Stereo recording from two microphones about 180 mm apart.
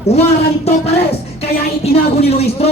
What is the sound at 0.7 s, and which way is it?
Speech, 35° left (ahead or behind).